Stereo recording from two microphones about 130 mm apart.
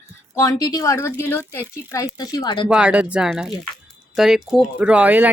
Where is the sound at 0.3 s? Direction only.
25° left (ahead or behind).